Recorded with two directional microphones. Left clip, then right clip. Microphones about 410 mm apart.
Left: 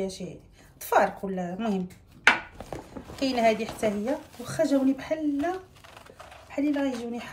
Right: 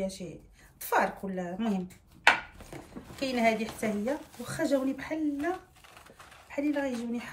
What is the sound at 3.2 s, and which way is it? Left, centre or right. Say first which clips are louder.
Speech: left 4 dB; centre.